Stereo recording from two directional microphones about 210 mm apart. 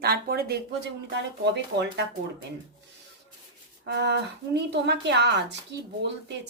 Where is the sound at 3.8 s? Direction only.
55° right (ahead or behind).